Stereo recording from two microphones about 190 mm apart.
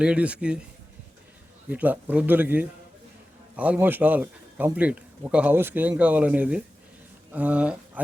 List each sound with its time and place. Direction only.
0.0 s speech: 5° right (ahead or behind)
1.7 s a man's voice: 10° right (ahead or behind)